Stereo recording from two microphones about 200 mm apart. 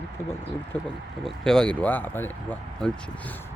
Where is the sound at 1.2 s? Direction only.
5° left (ahead or behind).